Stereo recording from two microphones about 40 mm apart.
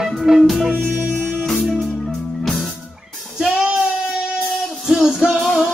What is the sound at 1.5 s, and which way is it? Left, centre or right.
Music, centre.